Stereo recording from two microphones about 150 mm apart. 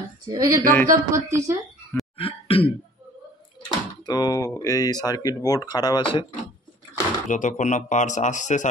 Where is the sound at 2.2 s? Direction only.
40° left (ahead or behind).